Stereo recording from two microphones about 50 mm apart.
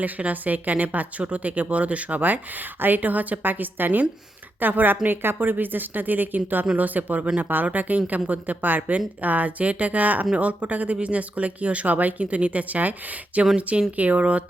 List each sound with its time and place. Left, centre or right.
0.0 s a woman's voice: right